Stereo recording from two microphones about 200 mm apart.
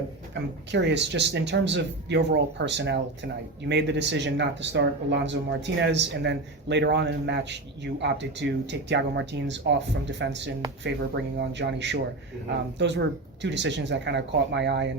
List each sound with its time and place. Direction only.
0.4 s speech: 60° right (ahead or behind)